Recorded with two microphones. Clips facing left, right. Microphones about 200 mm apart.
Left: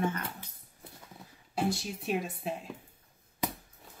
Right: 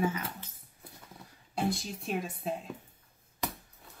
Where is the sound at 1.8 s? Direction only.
5° left (ahead or behind).